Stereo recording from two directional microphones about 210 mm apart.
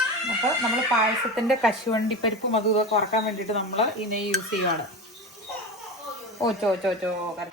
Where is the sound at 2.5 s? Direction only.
30° left (ahead or behind).